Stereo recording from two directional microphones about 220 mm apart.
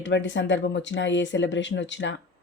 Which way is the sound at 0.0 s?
55° left (ahead or behind).